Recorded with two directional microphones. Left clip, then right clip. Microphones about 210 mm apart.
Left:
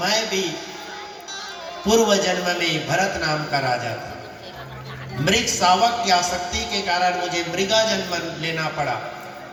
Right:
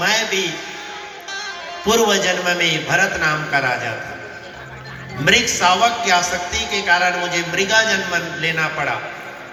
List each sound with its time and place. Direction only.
0.0 s a sound: 35° left (ahead or behind)
1.9 s a man's voice: 35° left (ahead or behind)
5.2 s a man's voice: 35° left (ahead or behind)